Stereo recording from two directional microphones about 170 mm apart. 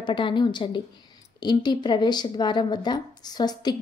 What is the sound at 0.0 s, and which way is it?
A woman's voice, 30° left (ahead or behind).